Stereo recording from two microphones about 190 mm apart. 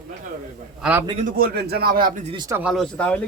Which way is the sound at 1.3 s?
55° right (ahead or behind).